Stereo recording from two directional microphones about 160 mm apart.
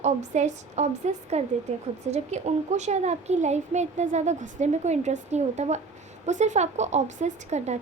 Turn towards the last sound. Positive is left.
turn(degrees=-45)  # may be behind; listen again after turning